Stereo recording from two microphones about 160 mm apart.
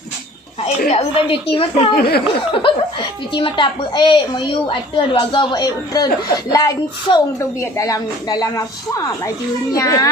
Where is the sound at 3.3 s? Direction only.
30° left (ahead or behind).